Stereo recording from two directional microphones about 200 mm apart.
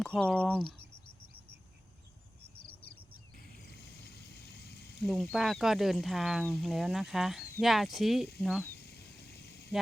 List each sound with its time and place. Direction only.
0.0 s speech: 5° left (ahead or behind)
2.6 s cricket: 25° left (ahead or behind)
3.7 s a sound: 55° left (ahead or behind)
4.9 s speech: centre (ahead or behind)
8.8 s vehicle: 55° left (ahead or behind)